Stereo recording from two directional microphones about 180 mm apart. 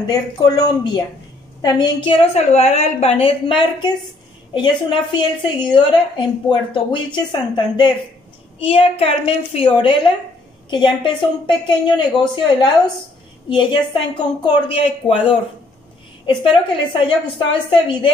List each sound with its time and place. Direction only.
0.0 s a woman's voice: 20° left (ahead or behind)
17.5 s a woman's voice: 30° left (ahead or behind)